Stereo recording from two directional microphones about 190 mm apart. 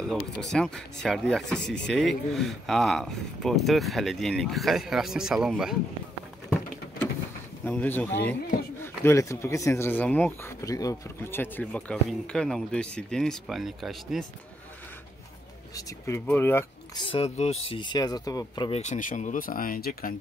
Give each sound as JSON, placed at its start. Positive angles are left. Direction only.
{"t": 0.1, "sound": "speech", "side_deg": 0}
{"t": 7.6, "sound": "speech", "side_deg": 10}
{"t": 15.7, "sound": "speech", "side_deg": 15}
{"t": 17.0, "sound": "speech", "side_deg": 30}
{"t": 18.8, "sound": "speech", "side_deg": 40}